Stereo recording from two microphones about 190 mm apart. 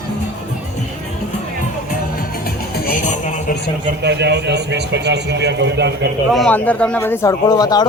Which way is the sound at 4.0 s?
65° right (ahead or behind).